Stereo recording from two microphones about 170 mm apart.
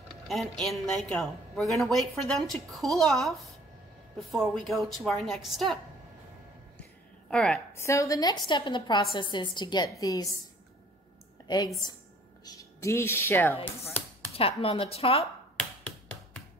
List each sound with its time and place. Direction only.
0.1 s a woman's voice: centre (ahead or behind)
6.8 s a sound: 5° left (ahead or behind)
7.7 s a woman's voice: 15° left (ahead or behind)
11.4 s a woman's voice: 25° left (ahead or behind)
14.3 s speech: 35° left (ahead or behind)